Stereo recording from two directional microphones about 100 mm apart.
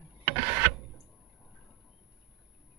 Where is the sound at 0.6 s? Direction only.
20° right (ahead or behind).